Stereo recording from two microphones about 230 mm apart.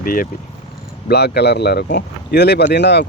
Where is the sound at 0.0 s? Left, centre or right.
Left.